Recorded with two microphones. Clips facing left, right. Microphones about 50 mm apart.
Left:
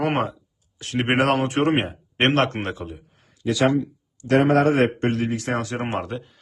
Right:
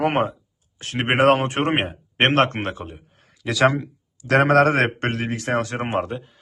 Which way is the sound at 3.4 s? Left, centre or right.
Right.